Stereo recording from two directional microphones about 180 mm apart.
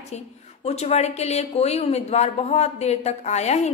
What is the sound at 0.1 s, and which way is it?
A woman's voice, 40° left (ahead or behind).